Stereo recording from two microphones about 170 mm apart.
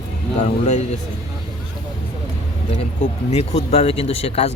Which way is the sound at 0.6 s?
40° left (ahead or behind).